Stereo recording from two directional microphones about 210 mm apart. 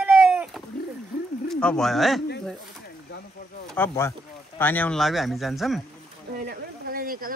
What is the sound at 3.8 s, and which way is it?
Speech, 15° left (ahead or behind).